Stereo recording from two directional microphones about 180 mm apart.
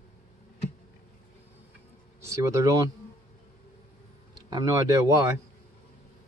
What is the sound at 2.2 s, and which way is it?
Speech, 15° right (ahead or behind).